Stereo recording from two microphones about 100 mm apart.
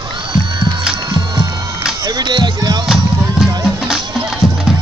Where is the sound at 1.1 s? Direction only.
40° right (ahead or behind).